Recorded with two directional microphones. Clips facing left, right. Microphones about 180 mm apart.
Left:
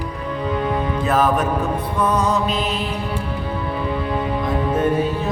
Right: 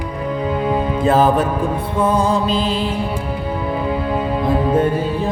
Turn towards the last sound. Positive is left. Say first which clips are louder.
# right 1 dB
turn(degrees=-30)  # may be behind; listen again after turning